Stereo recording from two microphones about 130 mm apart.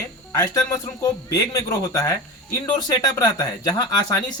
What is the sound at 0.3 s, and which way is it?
A man's voice, 25° left (ahead or behind).